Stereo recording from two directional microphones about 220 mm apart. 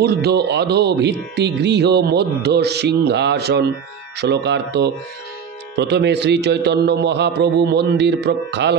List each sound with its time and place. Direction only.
0.0 s speech: 45° right (ahead or behind)